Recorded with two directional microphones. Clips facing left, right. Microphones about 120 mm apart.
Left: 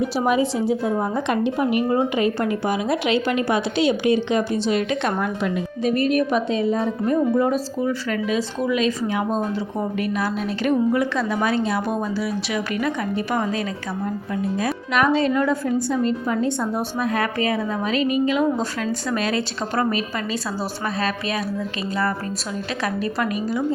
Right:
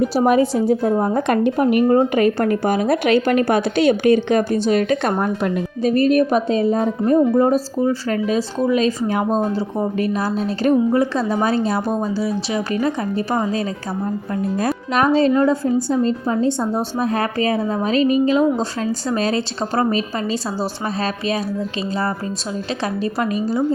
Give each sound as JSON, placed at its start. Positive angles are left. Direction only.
{"t": 0.0, "sound": "a woman's voice", "side_deg": -45}
{"t": 14.6, "sound": "a woman's voice", "side_deg": -35}
{"t": 22.8, "sound": "a woman's voice", "side_deg": -30}